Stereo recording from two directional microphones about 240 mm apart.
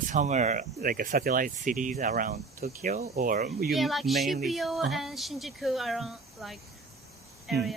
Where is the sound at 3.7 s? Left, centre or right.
Centre.